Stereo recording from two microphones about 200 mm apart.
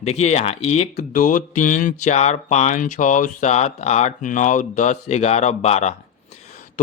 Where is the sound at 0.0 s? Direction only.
35° left (ahead or behind).